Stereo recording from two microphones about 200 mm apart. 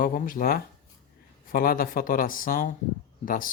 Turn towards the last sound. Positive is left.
turn(degrees=45)  # may be behind; listen again after turning